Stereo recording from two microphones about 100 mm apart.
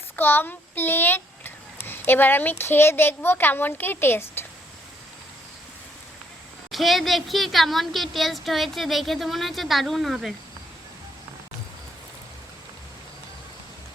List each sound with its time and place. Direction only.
0.2 s speech: 20° left (ahead or behind)
6.7 s speech: centre (ahead or behind)